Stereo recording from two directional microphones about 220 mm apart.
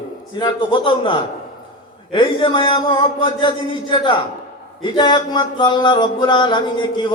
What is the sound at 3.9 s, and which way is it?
Music, 20° left (ahead or behind).